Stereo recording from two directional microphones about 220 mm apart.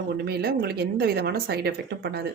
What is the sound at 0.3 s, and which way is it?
A woman's voice, 45° right (ahead or behind).